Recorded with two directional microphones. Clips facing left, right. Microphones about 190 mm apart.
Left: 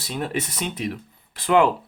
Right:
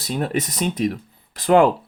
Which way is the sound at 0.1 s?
40° right (ahead or behind).